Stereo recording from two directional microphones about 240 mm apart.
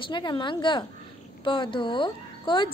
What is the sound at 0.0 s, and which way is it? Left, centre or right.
A woman's voice, centre.